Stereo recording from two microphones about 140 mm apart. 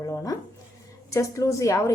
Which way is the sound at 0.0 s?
25° left (ahead or behind).